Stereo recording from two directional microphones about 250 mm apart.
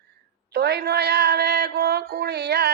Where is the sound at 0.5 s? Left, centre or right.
Right.